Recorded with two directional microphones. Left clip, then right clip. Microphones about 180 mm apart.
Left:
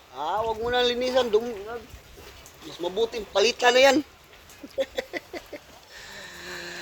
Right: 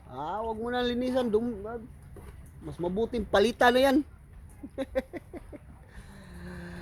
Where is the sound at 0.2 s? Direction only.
25° right (ahead or behind).